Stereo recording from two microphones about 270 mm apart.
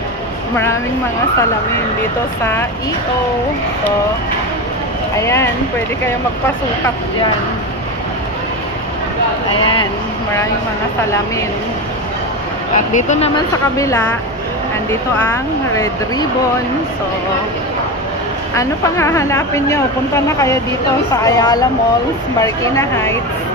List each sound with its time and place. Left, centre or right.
5.1 s speech: centre
12.7 s speech: left
13.7 s speech: centre
15.7 s speech: centre
18.5 s speech: centre